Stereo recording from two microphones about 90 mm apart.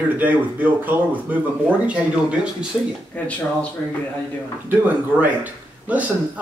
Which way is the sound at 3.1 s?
15° left (ahead or behind).